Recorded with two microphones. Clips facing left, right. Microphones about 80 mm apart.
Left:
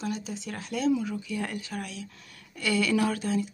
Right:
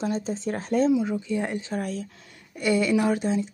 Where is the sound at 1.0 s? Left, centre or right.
Right.